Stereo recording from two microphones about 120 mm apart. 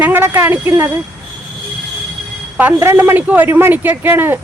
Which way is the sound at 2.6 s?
15° right (ahead or behind).